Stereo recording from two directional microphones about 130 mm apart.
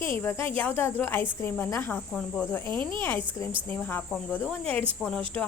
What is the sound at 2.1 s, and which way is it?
Cricket, centre (ahead or behind).